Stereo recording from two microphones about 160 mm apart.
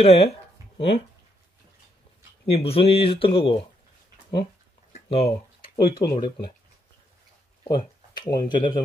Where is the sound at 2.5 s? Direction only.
35° left (ahead or behind).